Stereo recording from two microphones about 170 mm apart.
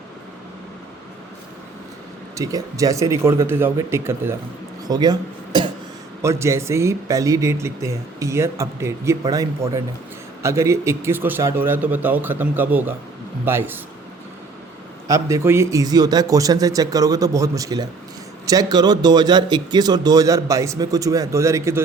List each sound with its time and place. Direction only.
2.3 s speech: 20° right (ahead or behind)
4.9 s a sound: 25° right (ahead or behind)
6.2 s speech: 15° right (ahead or behind)
15.0 s speech: 20° right (ahead or behind)